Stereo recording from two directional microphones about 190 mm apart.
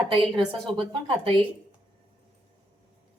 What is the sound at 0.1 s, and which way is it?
A woman's voice, 25° right (ahead or behind).